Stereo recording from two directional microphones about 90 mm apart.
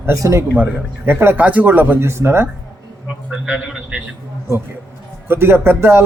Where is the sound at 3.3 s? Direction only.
10° right (ahead or behind).